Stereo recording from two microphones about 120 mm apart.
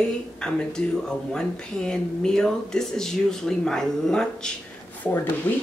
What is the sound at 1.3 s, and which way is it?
Speech, 5° left (ahead or behind).